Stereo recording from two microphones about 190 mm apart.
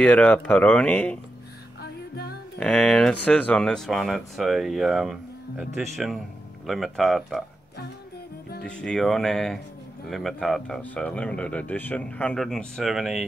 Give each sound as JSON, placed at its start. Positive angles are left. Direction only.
{"t": 0.0, "sound": "speech", "side_deg": 5}
{"t": 1.8, "sound": "music", "side_deg": 55}
{"t": 2.6, "sound": "speech", "side_deg": 5}
{"t": 8.6, "sound": "speech", "side_deg": 5}